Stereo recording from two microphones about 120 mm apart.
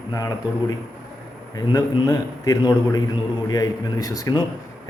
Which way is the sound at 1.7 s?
30° left (ahead or behind).